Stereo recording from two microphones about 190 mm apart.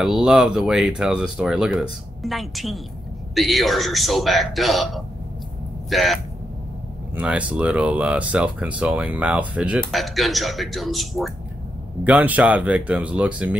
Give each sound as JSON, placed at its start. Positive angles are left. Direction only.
{"t": 0.0, "sound": "speech", "side_deg": 0}
{"t": 7.2, "sound": "speech", "side_deg": -5}